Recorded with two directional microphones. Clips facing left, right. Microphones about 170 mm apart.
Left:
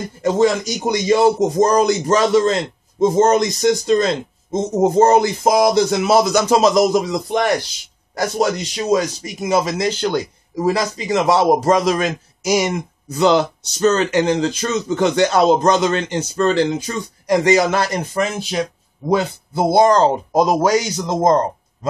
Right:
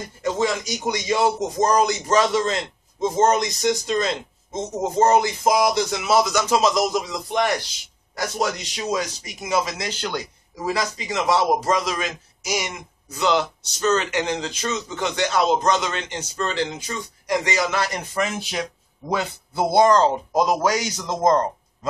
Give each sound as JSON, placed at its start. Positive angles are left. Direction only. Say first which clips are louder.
{"t": 0.2, "sound": "a man's voice", "louder": "left 7 dB", "side_deg": 40}